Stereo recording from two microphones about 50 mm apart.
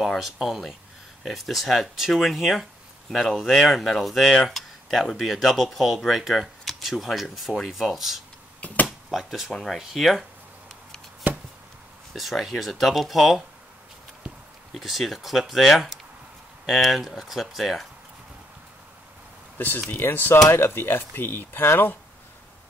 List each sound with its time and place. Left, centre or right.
0.0 s speech: centre
8.5 s a sound: left
8.8 s a sound: centre
9.5 s speech: centre
12.1 s speech: centre
14.7 s speech: centre
20.0 s speech: left